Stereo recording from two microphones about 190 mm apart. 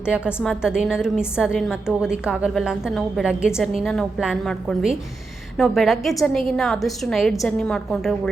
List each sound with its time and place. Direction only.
0.0 s a woman's voice: 5° right (ahead or behind)